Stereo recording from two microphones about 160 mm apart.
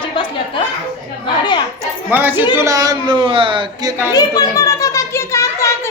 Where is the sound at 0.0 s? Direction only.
30° left (ahead or behind).